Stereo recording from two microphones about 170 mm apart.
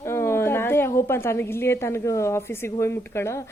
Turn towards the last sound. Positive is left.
turn(degrees=15)  # may be behind; listen again after turning